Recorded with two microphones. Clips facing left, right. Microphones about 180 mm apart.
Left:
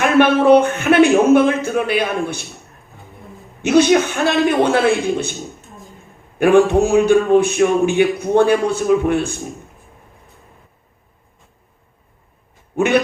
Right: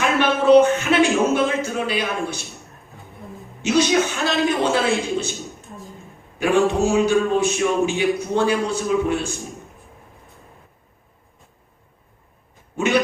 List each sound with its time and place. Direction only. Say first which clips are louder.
0.0 s a man's voice: left 6 dB; 55° left (ahead or behind)
3.6 s a man's voice: left 5 dB; 55° left (ahead or behind)
6.4 s a man's voice: left 6 dB; 55° left (ahead or behind)
12.7 s speech: left 4 dB; 55° left (ahead or behind)